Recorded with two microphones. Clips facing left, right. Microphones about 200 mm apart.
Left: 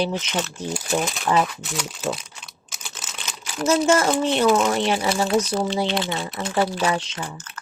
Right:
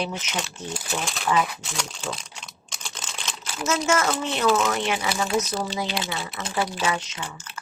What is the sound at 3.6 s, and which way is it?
Speech, 35° left (ahead or behind).